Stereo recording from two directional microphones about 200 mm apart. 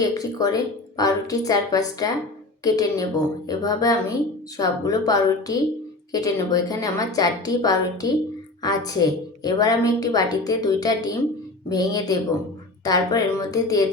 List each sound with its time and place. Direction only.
0.0 s a woman's voice: 20° left (ahead or behind)